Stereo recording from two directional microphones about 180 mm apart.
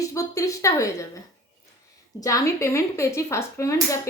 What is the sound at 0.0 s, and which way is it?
A woman's voice, 15° left (ahead or behind).